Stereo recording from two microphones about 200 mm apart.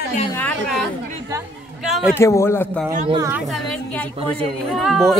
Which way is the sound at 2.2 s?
15° left (ahead or behind).